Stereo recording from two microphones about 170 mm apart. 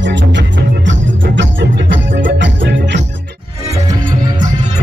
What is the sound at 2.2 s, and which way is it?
Music, 90° right.